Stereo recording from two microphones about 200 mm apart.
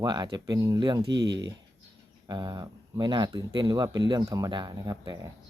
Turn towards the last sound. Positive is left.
turn(degrees=-20)  # may be behind; listen again after turning